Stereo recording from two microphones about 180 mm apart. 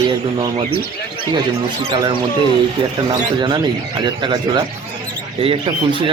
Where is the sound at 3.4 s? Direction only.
25° right (ahead or behind).